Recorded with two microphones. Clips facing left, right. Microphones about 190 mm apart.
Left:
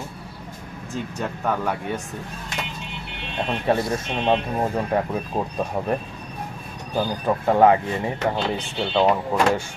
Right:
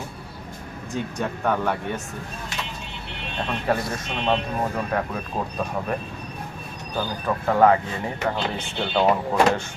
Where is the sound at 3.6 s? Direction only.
25° left (ahead or behind).